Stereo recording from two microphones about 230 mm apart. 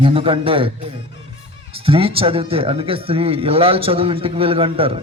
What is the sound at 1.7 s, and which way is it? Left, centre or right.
A man's voice, right.